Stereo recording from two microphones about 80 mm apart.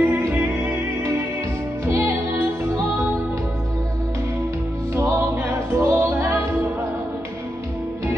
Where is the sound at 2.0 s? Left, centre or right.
Right.